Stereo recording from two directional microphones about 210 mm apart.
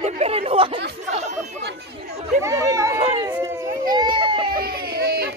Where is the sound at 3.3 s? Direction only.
15° right (ahead or behind).